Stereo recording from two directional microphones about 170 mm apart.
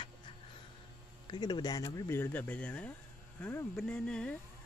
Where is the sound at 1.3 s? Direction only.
25° left (ahead or behind); by 4.3 s 5° left (ahead or behind).